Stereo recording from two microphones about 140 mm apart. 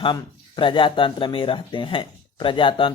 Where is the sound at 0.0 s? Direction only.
35° left (ahead or behind).